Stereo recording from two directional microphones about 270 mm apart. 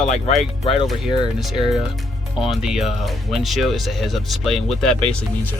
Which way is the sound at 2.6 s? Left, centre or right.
Centre.